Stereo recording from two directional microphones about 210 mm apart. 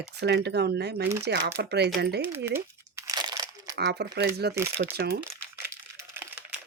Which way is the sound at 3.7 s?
50° right (ahead or behind).